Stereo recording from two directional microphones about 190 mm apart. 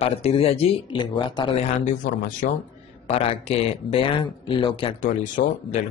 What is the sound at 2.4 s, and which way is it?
Speech, 45° left (ahead or behind).